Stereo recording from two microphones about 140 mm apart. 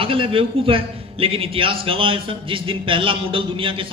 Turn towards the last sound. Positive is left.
turn(degrees=-40)  # may be behind; listen again after turning